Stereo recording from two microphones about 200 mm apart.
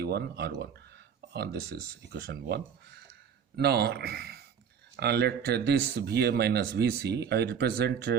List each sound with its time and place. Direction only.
0.0 s speech: 55° right (ahead or behind)